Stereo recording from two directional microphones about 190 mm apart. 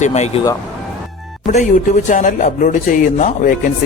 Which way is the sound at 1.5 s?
40° left (ahead or behind).